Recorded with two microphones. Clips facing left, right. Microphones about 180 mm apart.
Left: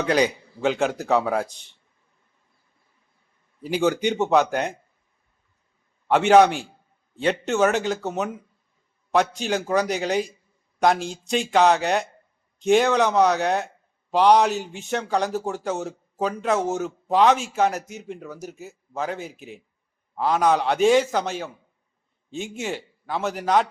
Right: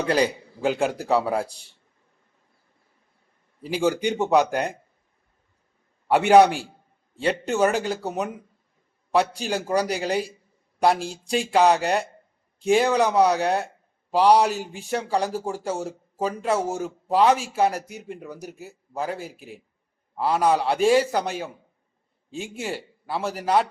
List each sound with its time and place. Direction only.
0.0 s a man's voice: 5° right (ahead or behind)
3.8 s a man's voice: 10° right (ahead or behind)
6.1 s a man's voice: 10° right (ahead or behind)
19.2 s a man's voice: centre (ahead or behind)